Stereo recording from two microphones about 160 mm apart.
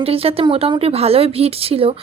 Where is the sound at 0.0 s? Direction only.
35° right (ahead or behind).